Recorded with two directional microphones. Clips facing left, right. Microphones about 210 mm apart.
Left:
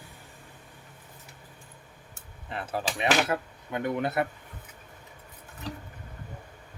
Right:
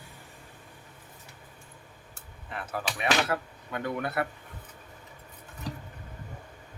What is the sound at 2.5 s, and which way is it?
Speech, 30° left (ahead or behind).